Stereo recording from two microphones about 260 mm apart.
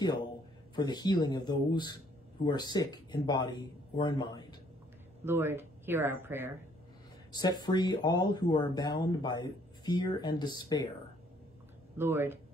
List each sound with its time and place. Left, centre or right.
0.7 s speech: centre
5.2 s speech: centre
7.3 s speech: centre
12.0 s speech: centre